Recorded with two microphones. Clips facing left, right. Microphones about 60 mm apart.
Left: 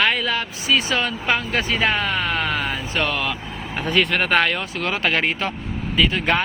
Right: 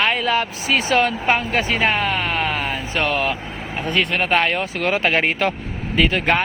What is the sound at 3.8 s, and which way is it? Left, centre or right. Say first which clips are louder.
Speech: left 1 dB; centre.